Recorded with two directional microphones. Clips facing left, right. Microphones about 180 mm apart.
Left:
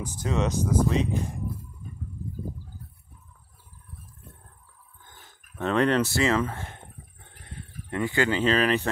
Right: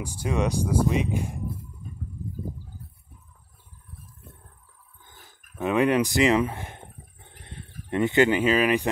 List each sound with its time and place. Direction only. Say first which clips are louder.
0.0 s speech: right 1 dB; 10° right (ahead or behind)
5.6 s speech: right 1 dB; 10° right (ahead or behind)